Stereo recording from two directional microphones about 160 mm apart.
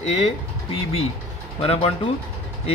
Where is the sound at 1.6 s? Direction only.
35° left (ahead or behind).